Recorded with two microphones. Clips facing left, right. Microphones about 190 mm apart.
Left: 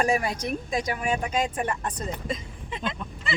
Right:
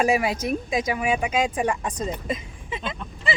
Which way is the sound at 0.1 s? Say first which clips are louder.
Right 3 dB; 90° right.